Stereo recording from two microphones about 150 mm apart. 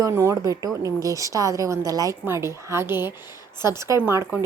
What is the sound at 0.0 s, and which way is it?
A woman's voice, 20° right (ahead or behind).